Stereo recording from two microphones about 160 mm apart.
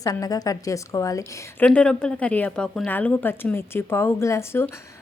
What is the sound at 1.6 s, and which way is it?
Speech, 5° left (ahead or behind).